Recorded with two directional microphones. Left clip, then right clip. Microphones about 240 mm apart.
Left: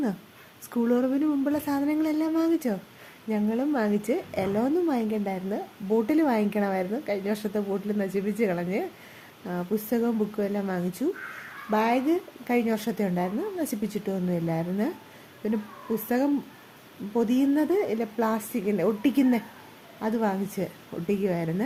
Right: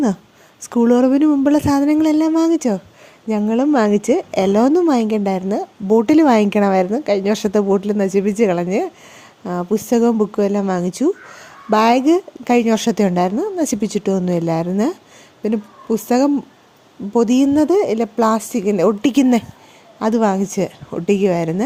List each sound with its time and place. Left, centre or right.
0.6 s a woman's voice: right
16.0 s a woman's voice: right